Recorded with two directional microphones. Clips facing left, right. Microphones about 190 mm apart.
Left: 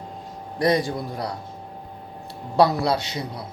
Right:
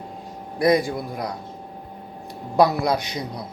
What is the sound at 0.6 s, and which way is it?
Speech, 10° right (ahead or behind).